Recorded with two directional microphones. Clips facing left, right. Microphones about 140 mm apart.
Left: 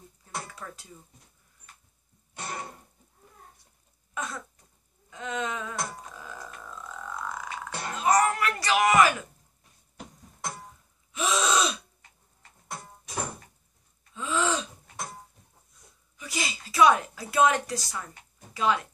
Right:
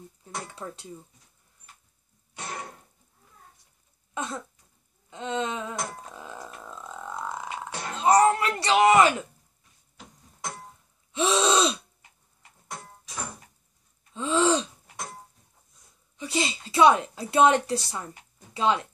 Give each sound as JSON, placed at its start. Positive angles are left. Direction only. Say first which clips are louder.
{"t": 0.5, "sound": "speech", "louder": "right 4 dB", "side_deg": -25}
{"t": 2.3, "sound": "cough", "louder": "even", "side_deg": 5}
{"t": 4.1, "sound": "throat clearing", "louder": "right 3 dB", "side_deg": -25}
{"t": 5.1, "sound": "a sound", "louder": "right 3 dB", "side_deg": -25}
{"t": 6.4, "sound": "burping", "louder": "right 1 dB", "side_deg": -25}
{"t": 7.9, "sound": "a sound", "louder": "right 4 dB", "side_deg": -30}
{"t": 11.1, "sound": "gasp", "louder": "right 3 dB", "side_deg": -30}
{"t": 12.6, "sound": "music", "louder": "even", "side_deg": 5}
{"t": 14.1, "sound": "gasp", "louder": "right 5 dB", "side_deg": -30}
{"t": 15.0, "sound": "a sound", "louder": "even", "side_deg": 5}
{"t": 16.2, "sound": "a woman's voice", "louder": "right 6 dB", "side_deg": -30}